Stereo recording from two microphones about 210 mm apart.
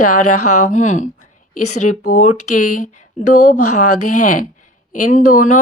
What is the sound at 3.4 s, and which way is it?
Speech, 90° left.